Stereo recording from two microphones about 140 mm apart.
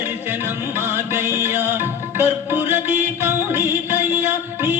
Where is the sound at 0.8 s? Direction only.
15° right (ahead or behind).